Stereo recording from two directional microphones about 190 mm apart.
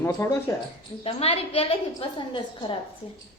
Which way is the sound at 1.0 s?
30° left (ahead or behind).